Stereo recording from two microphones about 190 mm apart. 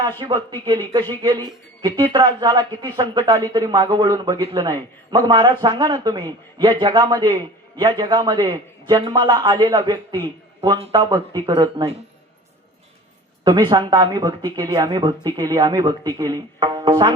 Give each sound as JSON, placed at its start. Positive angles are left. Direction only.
{"t": 0.2, "sound": "a man's voice", "side_deg": -25}
{"t": 13.4, "sound": "a man's voice", "side_deg": -20}